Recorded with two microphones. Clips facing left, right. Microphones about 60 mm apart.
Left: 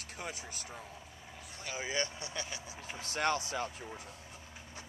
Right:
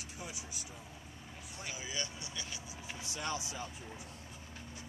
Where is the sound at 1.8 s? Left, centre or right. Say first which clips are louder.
Left 8 dB; left.